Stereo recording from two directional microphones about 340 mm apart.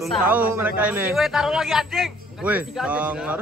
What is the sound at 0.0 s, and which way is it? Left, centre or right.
A man's voice, centre.